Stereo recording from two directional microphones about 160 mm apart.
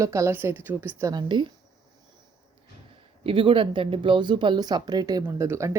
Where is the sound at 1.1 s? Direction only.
30° right (ahead or behind).